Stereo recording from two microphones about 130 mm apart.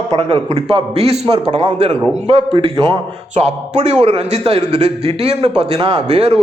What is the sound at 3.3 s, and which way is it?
A man's voice, 60° right (ahead or behind).